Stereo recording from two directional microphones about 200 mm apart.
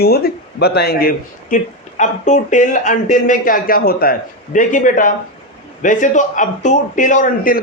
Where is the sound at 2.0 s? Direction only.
35° left (ahead or behind).